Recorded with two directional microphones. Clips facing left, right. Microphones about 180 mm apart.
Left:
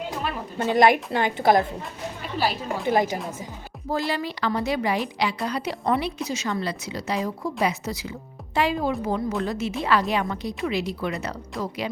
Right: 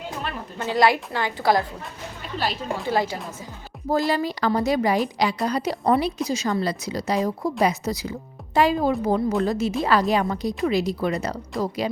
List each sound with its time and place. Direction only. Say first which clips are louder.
0.7 s a woman's voice: left 2 dB; 20° left (ahead or behind)
2.4 s a woman's voice: left 1 dB; 10° left (ahead or behind)
3.8 s a woman's voice: right 4 dB; 40° right (ahead or behind)